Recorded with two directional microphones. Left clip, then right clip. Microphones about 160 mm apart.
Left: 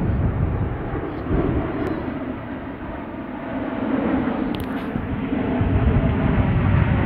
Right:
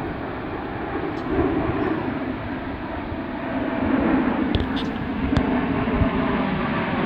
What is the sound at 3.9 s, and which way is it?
Vehicle, 25° left (ahead or behind).